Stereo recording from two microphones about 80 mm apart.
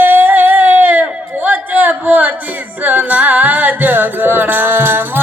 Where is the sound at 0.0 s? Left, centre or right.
Right.